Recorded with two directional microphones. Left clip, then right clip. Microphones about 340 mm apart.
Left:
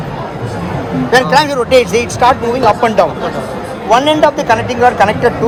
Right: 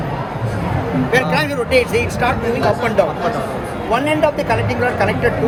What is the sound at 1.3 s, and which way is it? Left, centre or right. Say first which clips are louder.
Speech: left 7 dB; centre.